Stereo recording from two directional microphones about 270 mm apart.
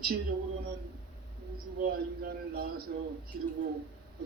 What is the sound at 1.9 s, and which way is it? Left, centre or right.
A man's voice, right.